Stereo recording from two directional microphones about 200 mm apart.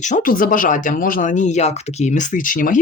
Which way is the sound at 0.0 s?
40° left (ahead or behind).